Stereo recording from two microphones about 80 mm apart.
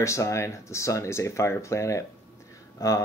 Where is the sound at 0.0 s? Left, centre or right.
Left.